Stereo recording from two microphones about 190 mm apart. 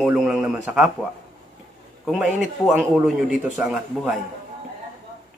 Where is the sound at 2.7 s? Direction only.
5° right (ahead or behind).